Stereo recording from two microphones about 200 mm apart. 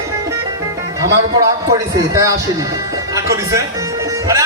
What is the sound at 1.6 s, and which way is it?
A man's voice, 15° right (ahead or behind).